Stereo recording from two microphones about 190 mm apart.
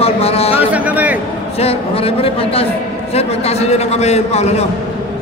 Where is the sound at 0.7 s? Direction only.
5° right (ahead or behind).